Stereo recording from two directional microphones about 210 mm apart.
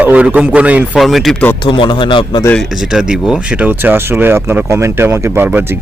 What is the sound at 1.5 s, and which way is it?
Speech, 20° left (ahead or behind).